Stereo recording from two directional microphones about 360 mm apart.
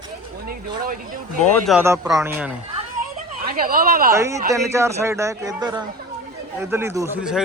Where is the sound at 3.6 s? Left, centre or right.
Right.